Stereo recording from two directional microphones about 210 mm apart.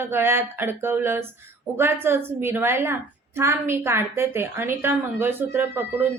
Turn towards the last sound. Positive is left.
turn(degrees=-10)  # may be behind; listen again after turning